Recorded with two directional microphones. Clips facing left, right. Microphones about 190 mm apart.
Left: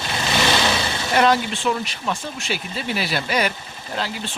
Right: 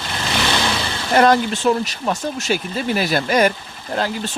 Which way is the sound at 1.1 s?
45° right (ahead or behind).